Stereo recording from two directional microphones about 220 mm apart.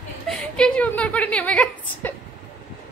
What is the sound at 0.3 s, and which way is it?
A woman's voice, 5° left (ahead or behind).